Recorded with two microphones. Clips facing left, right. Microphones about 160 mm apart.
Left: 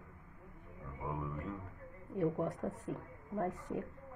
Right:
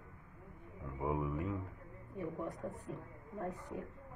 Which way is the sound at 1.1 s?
15° right (ahead or behind).